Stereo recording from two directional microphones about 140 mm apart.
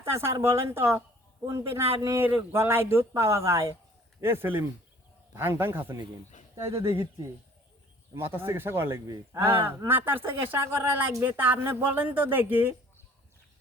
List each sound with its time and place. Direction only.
0.0 s a woman's voice: 20° right (ahead or behind)
8.1 s speech: 15° right (ahead or behind)